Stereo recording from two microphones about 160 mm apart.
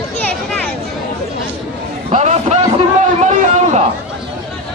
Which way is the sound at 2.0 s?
40° right (ahead or behind).